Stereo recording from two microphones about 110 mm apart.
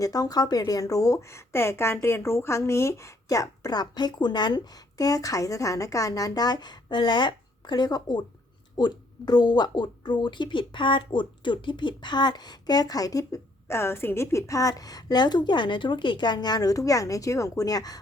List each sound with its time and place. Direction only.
0.0 s speech: 35° left (ahead or behind)